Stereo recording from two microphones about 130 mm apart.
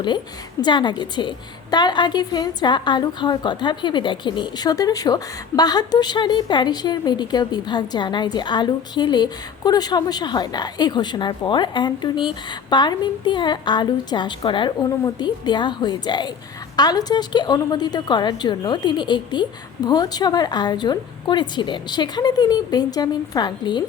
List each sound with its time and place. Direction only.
0.6 s a woman's voice: 35° left (ahead or behind)